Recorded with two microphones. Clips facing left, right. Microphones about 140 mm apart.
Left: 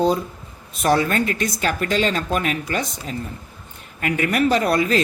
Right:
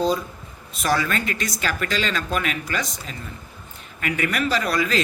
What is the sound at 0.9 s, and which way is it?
Speech, 45° left (ahead or behind).